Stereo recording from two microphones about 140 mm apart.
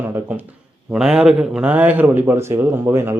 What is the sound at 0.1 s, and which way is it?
A man's voice, 10° right (ahead or behind).